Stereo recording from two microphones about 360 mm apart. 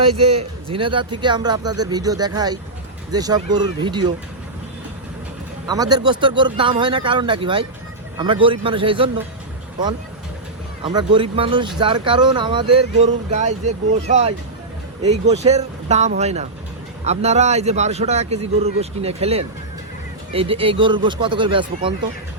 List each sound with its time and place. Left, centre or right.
0.1 s speech: centre
5.6 s speech: centre
10.8 s speech: centre
15.4 s speech: centre